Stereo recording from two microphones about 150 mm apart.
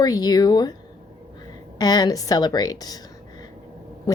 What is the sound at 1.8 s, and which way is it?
Speech, 25° left (ahead or behind).